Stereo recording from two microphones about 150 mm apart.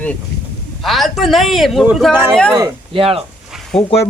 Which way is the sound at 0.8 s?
Centre (ahead or behind).